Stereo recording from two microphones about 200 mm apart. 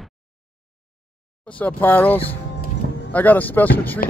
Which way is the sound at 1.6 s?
10° left (ahead or behind).